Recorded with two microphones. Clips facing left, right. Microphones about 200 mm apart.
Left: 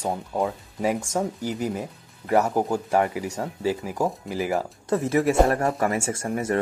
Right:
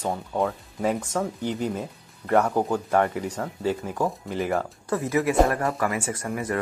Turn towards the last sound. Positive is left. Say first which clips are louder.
# left 3 dB
turn(degrees=30)  # may be behind; listen again after turning